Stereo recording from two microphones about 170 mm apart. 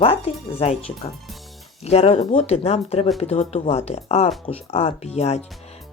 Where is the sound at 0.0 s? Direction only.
35° left (ahead or behind).